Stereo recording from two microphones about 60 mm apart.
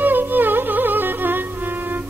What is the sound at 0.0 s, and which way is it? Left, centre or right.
Music, right.